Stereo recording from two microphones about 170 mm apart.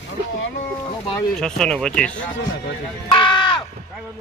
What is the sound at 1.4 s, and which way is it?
Speech, 5° left (ahead or behind).